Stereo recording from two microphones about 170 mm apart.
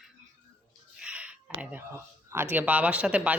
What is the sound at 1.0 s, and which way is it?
Speech, 5° right (ahead or behind).